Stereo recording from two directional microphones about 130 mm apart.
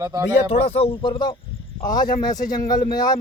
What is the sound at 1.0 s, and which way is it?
Speech, 35° left (ahead or behind).